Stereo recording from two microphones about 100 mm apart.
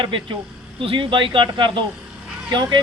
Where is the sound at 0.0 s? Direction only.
60° right (ahead or behind).